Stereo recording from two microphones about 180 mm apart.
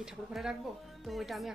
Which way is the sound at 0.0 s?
5° right (ahead or behind).